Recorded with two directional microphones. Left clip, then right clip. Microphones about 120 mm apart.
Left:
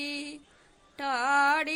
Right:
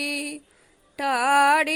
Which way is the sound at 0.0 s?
35° right (ahead or behind).